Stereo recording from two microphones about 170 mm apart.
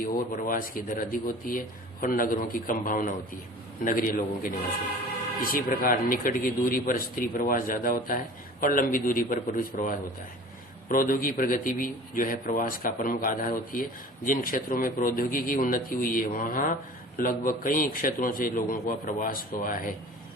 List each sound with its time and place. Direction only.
0.3 s a man's voice: 55° left (ahead or behind)